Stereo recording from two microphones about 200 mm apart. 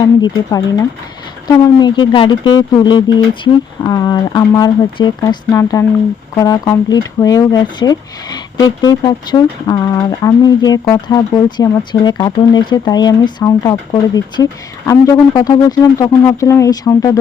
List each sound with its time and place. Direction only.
0.0 s speech: 20° left (ahead or behind)